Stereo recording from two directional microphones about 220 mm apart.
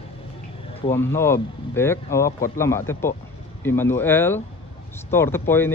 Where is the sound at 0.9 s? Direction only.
10° left (ahead or behind).